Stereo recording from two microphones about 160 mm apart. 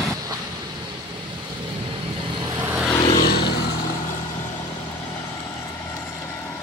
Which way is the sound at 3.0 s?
30° left (ahead or behind).